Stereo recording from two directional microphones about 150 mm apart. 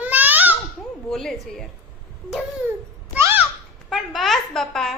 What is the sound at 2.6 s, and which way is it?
Babbling, 10° right (ahead or behind).